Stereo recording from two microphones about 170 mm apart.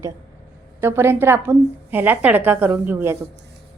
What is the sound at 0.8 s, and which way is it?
A woman's voice, 15° right (ahead or behind).